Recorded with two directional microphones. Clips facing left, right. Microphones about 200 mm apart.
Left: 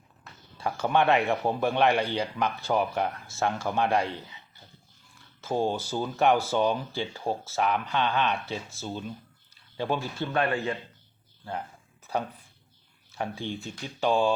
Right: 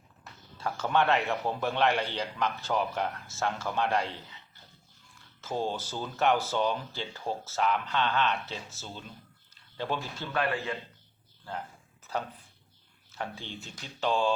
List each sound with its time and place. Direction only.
0.6 s a man's voice: 15° left (ahead or behind)
5.5 s a man's voice: 15° left (ahead or behind)
13.1 s a man's voice: 15° left (ahead or behind)